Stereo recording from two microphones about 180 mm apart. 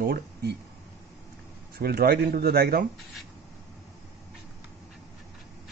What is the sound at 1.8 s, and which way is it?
Speech, 60° right (ahead or behind).